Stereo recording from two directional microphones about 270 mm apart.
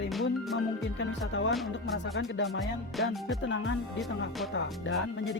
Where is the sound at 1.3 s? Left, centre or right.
Left.